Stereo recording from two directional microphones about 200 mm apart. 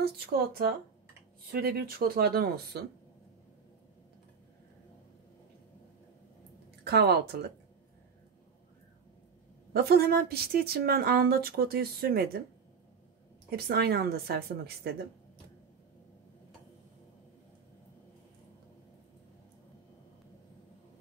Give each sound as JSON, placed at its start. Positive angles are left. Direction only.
{"t": 0.0, "sound": "a woman's voice", "side_deg": -50}
{"t": 6.8, "sound": "speech", "side_deg": -50}
{"t": 9.8, "sound": "a woman's voice", "side_deg": -50}
{"t": 13.5, "sound": "a woman's voice", "side_deg": -50}